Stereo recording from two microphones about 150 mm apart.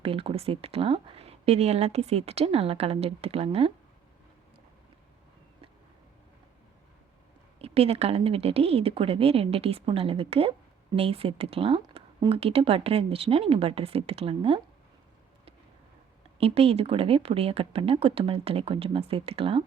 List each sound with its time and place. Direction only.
0.0 s speech: 40° right (ahead or behind)
7.6 s speech: 40° right (ahead or behind)
16.4 s speech: 40° right (ahead or behind)